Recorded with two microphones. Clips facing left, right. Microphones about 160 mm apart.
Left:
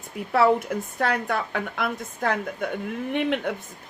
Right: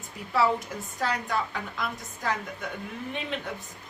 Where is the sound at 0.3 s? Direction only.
55° left (ahead or behind).